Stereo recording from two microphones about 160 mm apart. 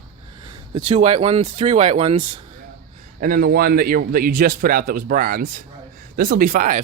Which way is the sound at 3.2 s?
70° right (ahead or behind).